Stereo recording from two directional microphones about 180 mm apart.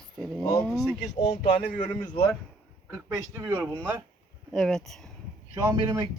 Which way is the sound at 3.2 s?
15° right (ahead or behind).